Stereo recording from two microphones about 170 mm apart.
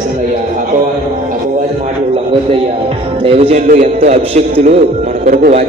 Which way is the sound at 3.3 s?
35° right (ahead or behind).